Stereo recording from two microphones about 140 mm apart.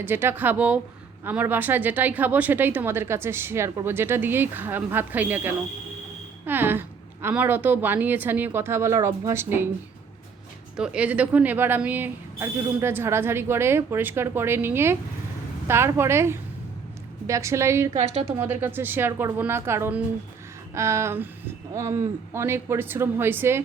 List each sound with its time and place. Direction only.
0.0 s speech: 15° right (ahead or behind)
10.8 s a woman's voice: 5° right (ahead or behind)
18.0 s a woman's voice: 45° right (ahead or behind)
18.3 s speech: 15° right (ahead or behind)